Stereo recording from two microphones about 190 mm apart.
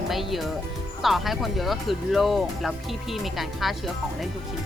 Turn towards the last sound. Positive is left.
turn(degrees=0)  # may be behind; listen again after turning